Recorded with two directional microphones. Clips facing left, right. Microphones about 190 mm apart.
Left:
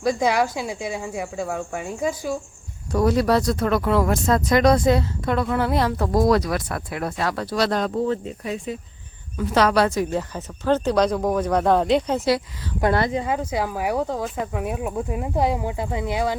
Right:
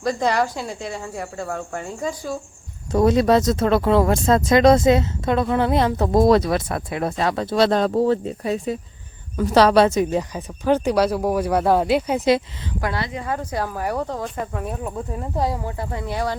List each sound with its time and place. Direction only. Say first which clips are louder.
0.0 s speech: even; 10° left (ahead or behind)
2.9 s speech: right 3 dB; 20° right (ahead or behind)
7.9 s speech: right 4 dB; 35° right (ahead or behind); by 12.4 s 15° right (ahead or behind)
13.2 s speech: left 1 dB; 10° left (ahead or behind)